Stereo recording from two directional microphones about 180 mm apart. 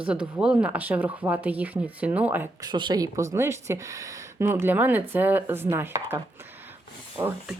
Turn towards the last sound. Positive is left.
turn(degrees=-15)  # may be behind; listen again after turning